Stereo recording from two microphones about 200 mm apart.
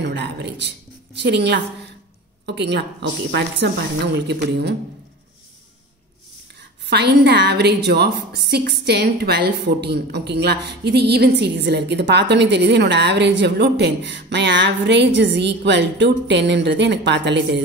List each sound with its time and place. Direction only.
0.0 s a woman's voice: 60° right (ahead or behind)
6.9 s a woman's voice: 55° right (ahead or behind)